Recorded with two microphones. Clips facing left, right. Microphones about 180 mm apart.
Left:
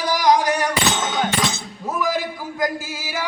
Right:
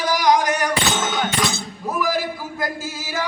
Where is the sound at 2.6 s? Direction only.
10° left (ahead or behind).